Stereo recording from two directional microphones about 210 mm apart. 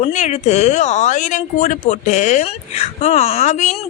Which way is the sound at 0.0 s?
35° left (ahead or behind).